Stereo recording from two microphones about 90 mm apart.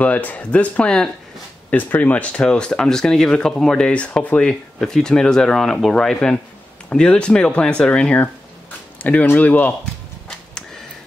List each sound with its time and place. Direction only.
0.0 s speech: 15° left (ahead or behind)